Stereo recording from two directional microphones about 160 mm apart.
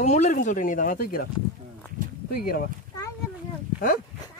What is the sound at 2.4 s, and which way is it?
Speech, 65° left (ahead or behind).